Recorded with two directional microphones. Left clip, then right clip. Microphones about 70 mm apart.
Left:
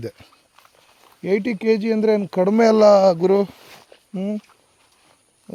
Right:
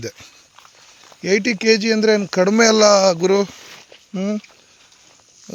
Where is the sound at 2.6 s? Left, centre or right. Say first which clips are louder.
Even; left.